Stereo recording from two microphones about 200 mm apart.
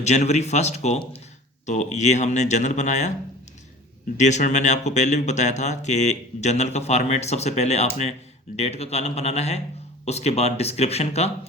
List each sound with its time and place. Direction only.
0.0 s speech: 35° left (ahead or behind)
4.2 s speech: 35° left (ahead or behind)